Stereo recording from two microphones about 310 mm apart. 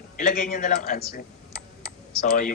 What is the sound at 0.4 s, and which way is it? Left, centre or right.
Speech, left.